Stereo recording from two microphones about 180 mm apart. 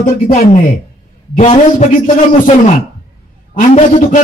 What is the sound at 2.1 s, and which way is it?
A man's voice, 40° left (ahead or behind).